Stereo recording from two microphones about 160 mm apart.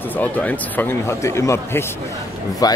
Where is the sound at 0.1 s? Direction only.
10° left (ahead or behind).